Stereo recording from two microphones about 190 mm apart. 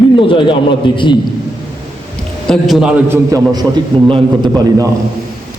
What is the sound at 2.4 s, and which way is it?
A man's voice, centre (ahead or behind).